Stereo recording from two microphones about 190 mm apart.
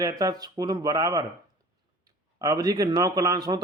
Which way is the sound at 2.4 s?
20° right (ahead or behind).